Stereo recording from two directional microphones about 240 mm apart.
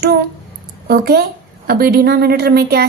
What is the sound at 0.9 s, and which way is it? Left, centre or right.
Speech, right.